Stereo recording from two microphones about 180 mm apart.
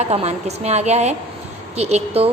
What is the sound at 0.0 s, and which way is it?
A woman's voice, 35° right (ahead or behind).